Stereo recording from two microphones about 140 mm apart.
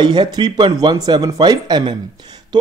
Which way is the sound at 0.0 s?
30° right (ahead or behind).